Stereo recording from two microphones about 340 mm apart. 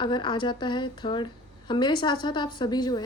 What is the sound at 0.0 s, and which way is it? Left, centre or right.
Speech, centre.